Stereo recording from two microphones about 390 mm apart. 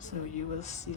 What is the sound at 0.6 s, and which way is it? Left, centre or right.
Speech, centre.